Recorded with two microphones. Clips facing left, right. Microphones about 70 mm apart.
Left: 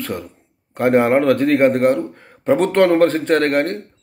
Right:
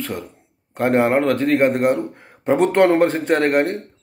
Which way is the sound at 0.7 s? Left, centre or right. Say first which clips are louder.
Left 2 dB; centre.